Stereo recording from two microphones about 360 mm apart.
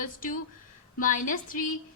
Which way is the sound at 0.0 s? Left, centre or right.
Left.